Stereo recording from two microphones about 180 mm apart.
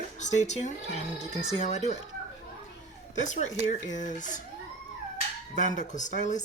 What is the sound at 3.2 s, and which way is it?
Speech, 40° left (ahead or behind).